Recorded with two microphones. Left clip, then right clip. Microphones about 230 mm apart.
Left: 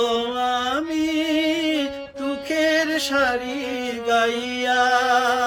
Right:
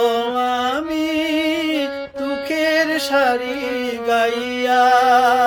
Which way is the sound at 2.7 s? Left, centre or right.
Centre.